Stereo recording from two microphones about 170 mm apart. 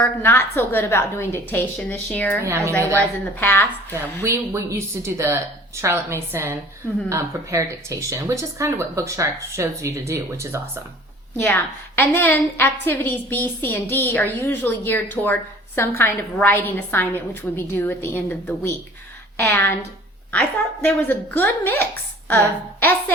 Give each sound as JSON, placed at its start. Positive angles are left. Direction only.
{"t": 0.0, "sound": "a woman's voice", "side_deg": 10}
{"t": 2.4, "sound": "speech", "side_deg": -15}
{"t": 3.3, "sound": "a woman's voice", "side_deg": 10}
{"t": 4.2, "sound": "speech", "side_deg": -15}
{"t": 11.3, "sound": "a woman's voice", "side_deg": 10}
{"t": 20.8, "sound": "a woman's voice", "side_deg": 10}